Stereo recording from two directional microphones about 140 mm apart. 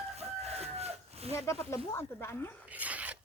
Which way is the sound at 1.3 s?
20° left (ahead or behind).